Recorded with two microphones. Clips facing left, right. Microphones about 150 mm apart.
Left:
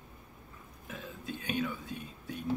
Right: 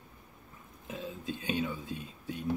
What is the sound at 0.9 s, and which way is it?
Speech, 20° right (ahead or behind).